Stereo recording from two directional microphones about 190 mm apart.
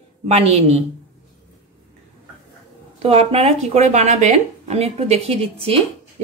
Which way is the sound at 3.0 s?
30° right (ahead or behind).